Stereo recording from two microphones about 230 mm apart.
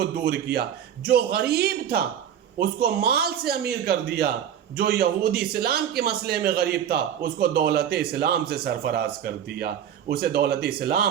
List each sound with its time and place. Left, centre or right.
0.0 s a man's voice: right